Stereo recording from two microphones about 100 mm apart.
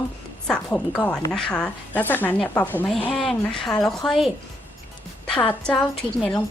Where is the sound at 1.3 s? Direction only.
5° left (ahead or behind).